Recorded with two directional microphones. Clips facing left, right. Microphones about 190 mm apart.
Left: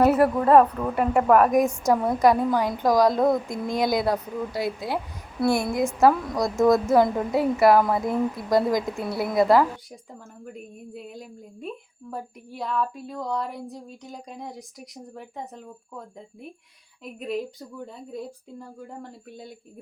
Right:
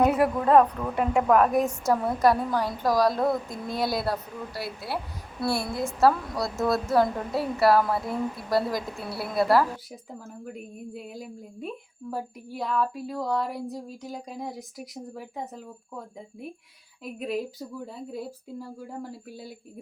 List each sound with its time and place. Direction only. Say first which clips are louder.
0.0 s a woman's voice: left 3 dB; 5° left (ahead or behind)
9.9 s speech: right 2 dB; centre (ahead or behind)
17.0 s speech: even; centre (ahead or behind)